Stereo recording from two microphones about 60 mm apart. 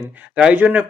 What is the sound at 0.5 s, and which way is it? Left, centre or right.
Speech, right.